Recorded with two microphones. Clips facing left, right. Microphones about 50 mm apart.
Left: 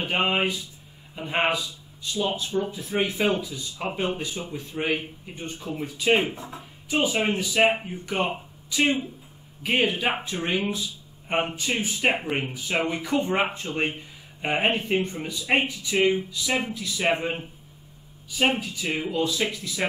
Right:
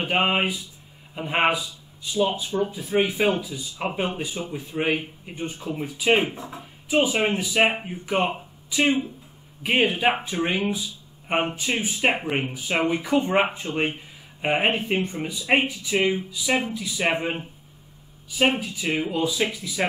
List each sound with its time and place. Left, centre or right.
0.0 s speech: centre
18.4 s speech: centre